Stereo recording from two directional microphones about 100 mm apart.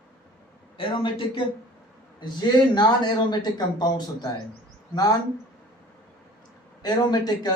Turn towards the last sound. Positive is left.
turn(degrees=45)  # may be behind; listen again after turning